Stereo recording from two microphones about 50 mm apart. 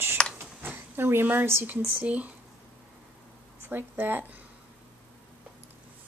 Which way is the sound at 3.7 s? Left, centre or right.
Right.